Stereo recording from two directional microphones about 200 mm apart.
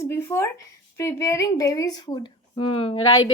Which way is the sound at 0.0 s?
10° left (ahead or behind).